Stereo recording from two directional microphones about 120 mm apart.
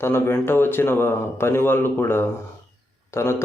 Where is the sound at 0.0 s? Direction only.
20° left (ahead or behind).